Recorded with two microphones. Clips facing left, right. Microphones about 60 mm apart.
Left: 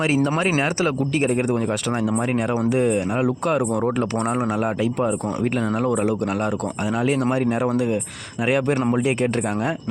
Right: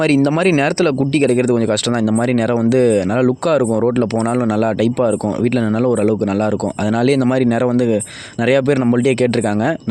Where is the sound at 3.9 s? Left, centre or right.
Right.